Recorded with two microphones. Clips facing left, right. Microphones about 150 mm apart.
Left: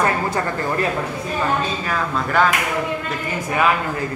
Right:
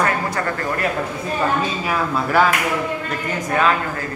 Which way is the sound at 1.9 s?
5° right (ahead or behind).